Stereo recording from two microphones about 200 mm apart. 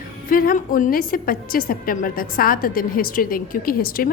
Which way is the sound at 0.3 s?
45° left (ahead or behind).